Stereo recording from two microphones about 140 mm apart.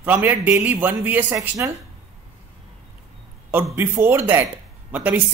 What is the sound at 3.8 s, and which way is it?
Speech, 15° right (ahead or behind).